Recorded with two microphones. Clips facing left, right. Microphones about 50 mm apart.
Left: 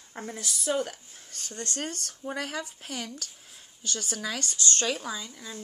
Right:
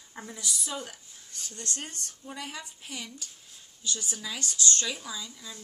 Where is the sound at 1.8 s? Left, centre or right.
Left.